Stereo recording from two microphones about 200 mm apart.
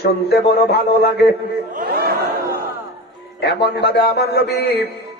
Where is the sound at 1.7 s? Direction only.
50° right (ahead or behind).